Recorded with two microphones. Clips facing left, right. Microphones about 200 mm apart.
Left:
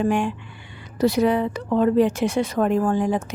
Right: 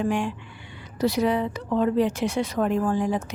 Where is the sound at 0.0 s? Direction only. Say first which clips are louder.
Left 4 dB; 55° left (ahead or behind).